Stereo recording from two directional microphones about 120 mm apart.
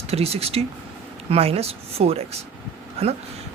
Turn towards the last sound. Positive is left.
turn(degrees=-60)  # may be behind; listen again after turning